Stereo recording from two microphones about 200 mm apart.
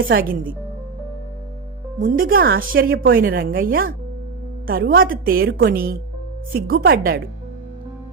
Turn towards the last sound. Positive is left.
turn(degrees=-50)  # may be behind; listen again after turning